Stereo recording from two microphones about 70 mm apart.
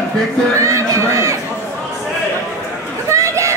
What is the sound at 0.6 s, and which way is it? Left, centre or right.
Speech, right.